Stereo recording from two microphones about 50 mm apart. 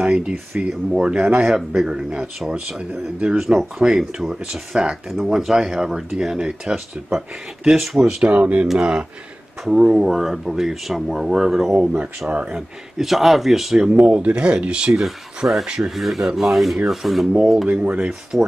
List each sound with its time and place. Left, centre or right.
0.0 s speech: centre
8.0 s speech: centre
9.7 s speech: centre
12.5 s speech: centre
14.0 s speech: right; by 15.6 s centre
15.6 s speech: centre
15.9 s speech: centre
17.8 s speech: right
18.3 s speech: centre